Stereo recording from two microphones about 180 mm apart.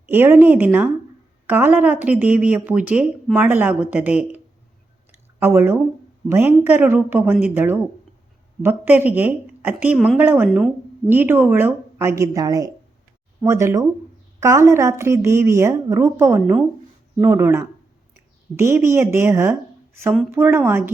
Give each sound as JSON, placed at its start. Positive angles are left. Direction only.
{"t": 0.1, "sound": "a woman's voice", "side_deg": -10}
{"t": 5.4, "sound": "a woman's voice", "side_deg": -15}